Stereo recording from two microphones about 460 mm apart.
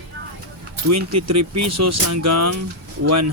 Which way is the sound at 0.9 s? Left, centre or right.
Right.